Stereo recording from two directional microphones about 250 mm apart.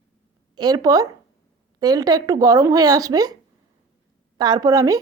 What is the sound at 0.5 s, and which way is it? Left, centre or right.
Speech, centre.